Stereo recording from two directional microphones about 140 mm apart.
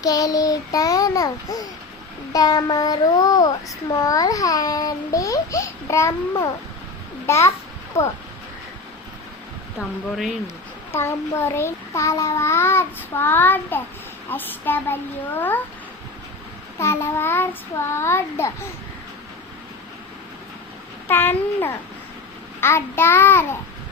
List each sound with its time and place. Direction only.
0.0 s child singing: 25° left (ahead or behind)
10.9 s child singing: 20° left (ahead or behind)
16.8 s child singing: 20° left (ahead or behind)
21.1 s child singing: 15° left (ahead or behind)